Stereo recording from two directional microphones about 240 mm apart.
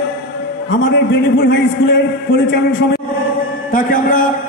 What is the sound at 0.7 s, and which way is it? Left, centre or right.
A man's voice, left.